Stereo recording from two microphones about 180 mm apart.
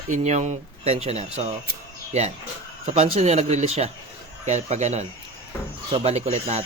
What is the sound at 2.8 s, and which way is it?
Speech, 35° right (ahead or behind).